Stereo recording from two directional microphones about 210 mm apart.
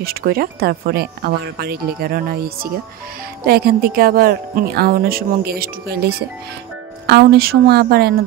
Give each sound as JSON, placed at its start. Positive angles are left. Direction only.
{"t": 0.0, "sound": "speech", "side_deg": -45}